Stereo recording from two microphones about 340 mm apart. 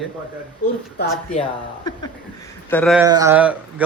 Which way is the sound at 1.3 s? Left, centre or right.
Centre.